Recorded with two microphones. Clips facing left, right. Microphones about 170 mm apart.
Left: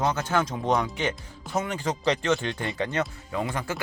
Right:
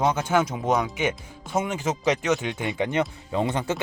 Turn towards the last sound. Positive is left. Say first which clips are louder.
# right 4 dB
turn(degrees=-25)  # may be behind; listen again after turning